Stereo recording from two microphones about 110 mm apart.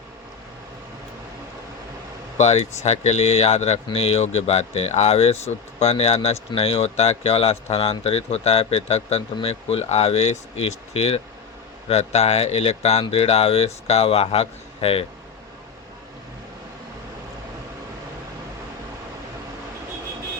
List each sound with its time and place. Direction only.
2.4 s speech: 80° left; by 15.0 s 60° left (ahead or behind)